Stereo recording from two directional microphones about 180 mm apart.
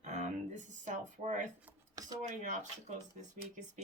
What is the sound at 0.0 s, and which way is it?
Music, 40° right (ahead or behind).